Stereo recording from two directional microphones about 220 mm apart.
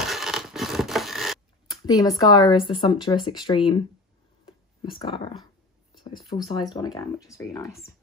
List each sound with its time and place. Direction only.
0.0 s scratch: centre (ahead or behind)
1.9 s speech: 15° left (ahead or behind)
4.5 s a sound: 25° left (ahead or behind)
6.0 s speech: 25° left (ahead or behind)